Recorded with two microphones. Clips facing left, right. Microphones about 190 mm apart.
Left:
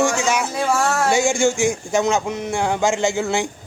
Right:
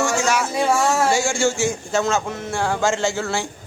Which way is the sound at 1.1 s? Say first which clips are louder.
Left 3 dB; 20° left (ahead or behind).